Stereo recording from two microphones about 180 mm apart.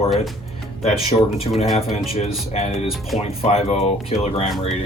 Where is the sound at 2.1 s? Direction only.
35° left (ahead or behind).